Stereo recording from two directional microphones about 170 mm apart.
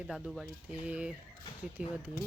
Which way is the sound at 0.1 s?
Centre (ahead or behind).